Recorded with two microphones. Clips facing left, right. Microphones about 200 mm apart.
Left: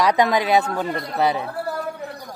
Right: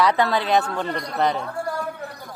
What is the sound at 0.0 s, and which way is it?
Speech, 15° left (ahead or behind).